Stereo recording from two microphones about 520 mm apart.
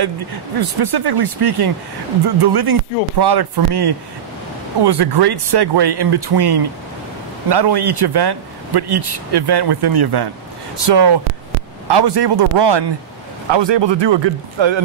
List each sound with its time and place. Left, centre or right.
0.9 s speech: right